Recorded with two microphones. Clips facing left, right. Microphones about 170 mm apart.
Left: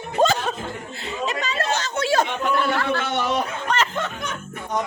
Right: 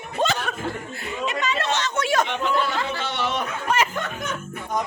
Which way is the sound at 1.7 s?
35° left (ahead or behind).